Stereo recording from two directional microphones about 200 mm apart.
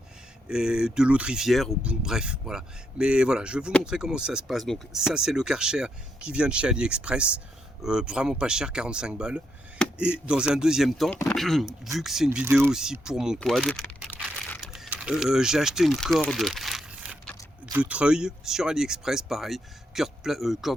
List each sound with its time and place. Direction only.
0.4 s speech: 5° right (ahead or behind)
14.6 s mechanisms: centre (ahead or behind)
14.9 s speech: 5° right (ahead or behind)